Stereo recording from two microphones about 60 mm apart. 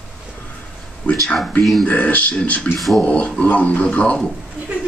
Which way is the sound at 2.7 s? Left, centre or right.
Centre.